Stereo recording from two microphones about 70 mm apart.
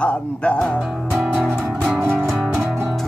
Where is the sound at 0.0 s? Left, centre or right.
Centre.